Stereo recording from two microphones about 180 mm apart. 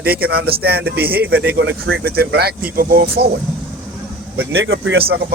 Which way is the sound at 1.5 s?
80° right.